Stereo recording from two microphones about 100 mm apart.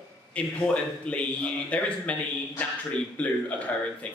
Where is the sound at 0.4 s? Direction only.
10° left (ahead or behind).